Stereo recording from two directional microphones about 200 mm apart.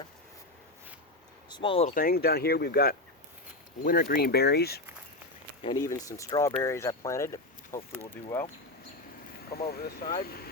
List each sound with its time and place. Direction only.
1.5 s speech: 25° left (ahead or behind)
1.9 s speech: 45° left (ahead or behind)
5.6 s speech: 20° left (ahead or behind)
9.5 s speech: 50° left (ahead or behind)